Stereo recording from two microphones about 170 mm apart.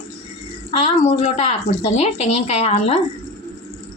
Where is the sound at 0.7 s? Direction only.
35° left (ahead or behind).